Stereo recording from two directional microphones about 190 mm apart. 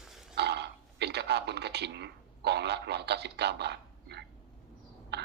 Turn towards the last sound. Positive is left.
turn(degrees=-60)  # may be behind; listen again after turning